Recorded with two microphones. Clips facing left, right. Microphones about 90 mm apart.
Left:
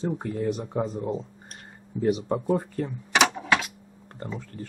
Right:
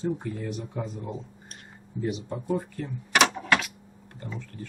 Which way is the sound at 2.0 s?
55° left (ahead or behind).